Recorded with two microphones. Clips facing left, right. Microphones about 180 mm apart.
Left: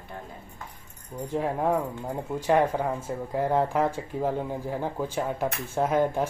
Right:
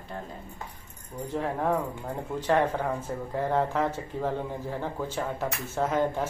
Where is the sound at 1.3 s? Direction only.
15° left (ahead or behind).